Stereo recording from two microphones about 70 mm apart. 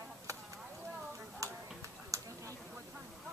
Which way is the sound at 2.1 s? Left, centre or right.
Right.